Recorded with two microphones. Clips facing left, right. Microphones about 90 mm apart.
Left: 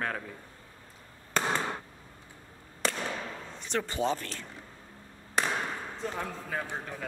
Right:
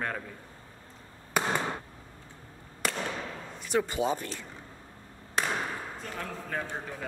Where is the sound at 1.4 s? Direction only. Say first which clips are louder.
Right 1 dB; 10° right (ahead or behind).